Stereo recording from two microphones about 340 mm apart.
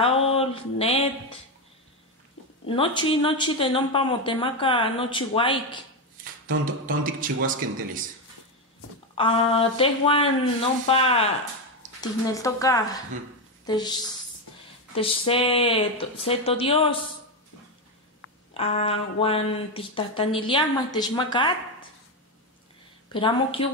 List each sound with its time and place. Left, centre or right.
0.0 s a sound: centre
2.6 s speech: centre
6.6 s speech: right
9.1 s speech: centre
15.0 s speech: centre
18.5 s speech: centre
23.1 s speech: centre